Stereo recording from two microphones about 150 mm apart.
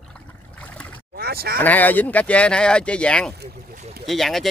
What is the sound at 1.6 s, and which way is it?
Speech, 10° left (ahead or behind).